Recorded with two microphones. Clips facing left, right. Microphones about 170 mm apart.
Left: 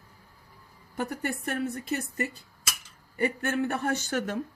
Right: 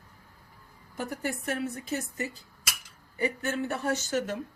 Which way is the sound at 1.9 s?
60° left (ahead or behind).